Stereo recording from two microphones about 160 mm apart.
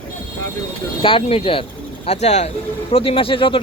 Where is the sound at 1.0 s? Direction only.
35° left (ahead or behind).